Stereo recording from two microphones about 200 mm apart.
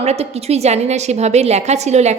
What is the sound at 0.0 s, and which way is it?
A woman's voice, 30° right (ahead or behind).